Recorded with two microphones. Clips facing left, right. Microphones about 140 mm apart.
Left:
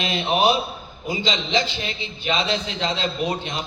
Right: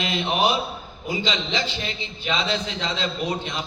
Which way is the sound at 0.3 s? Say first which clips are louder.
Left 4 dB; 20° left (ahead or behind).